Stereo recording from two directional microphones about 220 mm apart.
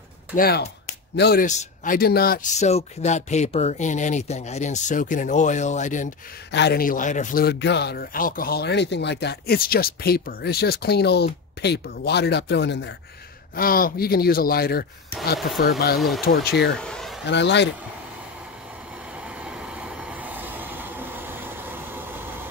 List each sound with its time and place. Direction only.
0.4 s speech: 45° left (ahead or behind)
1.4 s speech: 35° left (ahead or behind)
6.5 s speech: 50° left (ahead or behind)
13.6 s speech: 40° left (ahead or behind)
16.0 s speech: centre (ahead or behind)
16.4 s speech: 50° left (ahead or behind)
16.7 s a sound: 5° left (ahead or behind)
17.3 s speech: 50° left (ahead or behind)
19.4 s vehicle: 5° right (ahead or behind)